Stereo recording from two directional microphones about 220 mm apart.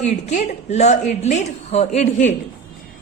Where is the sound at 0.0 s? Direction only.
30° left (ahead or behind).